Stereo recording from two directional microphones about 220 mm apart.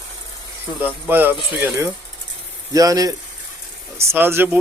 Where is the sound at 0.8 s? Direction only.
10° right (ahead or behind).